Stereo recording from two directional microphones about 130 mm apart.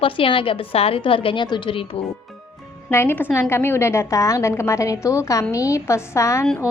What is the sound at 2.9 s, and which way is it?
A woman's voice, 20° left (ahead or behind).